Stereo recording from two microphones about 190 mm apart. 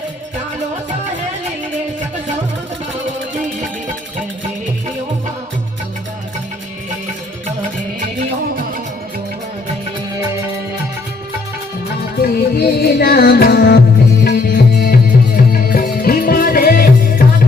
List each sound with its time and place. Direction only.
12.2 s music: 55° left (ahead or behind)